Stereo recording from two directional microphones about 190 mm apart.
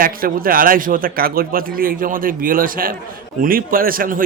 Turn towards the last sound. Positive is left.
turn(degrees=-50)  # may be behind; listen again after turning